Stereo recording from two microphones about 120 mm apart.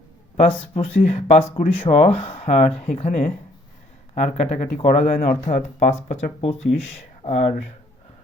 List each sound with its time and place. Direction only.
0.3 s speech: 55° left (ahead or behind)
1.8 s speech: 55° left (ahead or behind)